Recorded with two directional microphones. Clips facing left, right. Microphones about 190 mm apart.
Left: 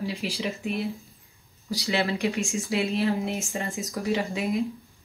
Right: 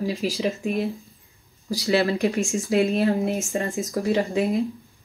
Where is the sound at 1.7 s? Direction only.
35° right (ahead or behind).